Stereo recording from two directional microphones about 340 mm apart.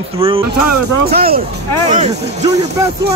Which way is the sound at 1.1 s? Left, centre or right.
Right.